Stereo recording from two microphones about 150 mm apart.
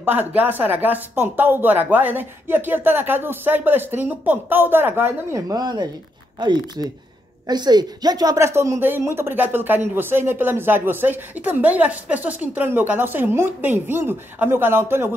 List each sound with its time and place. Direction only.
0.0 s a woman's voice: 10° right (ahead or behind)